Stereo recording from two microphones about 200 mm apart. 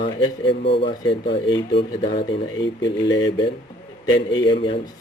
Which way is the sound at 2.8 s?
65° left (ahead or behind).